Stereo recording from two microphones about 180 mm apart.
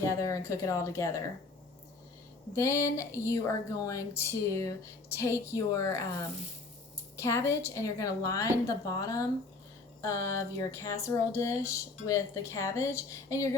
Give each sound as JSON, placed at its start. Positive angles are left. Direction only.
{"t": 0.0, "sound": "speech", "side_deg": 15}
{"t": 2.6, "sound": "speech", "side_deg": 15}
{"t": 7.2, "sound": "speech", "side_deg": 15}